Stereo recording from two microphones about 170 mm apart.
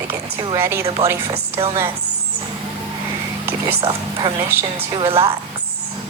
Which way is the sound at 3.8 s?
30° right (ahead or behind).